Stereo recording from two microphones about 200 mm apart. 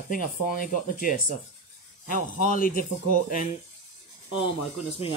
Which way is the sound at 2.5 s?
45° left (ahead or behind).